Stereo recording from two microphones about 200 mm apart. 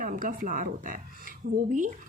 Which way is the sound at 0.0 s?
45° right (ahead or behind).